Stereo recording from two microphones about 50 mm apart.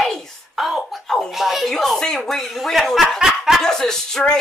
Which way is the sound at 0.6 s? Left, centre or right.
Centre.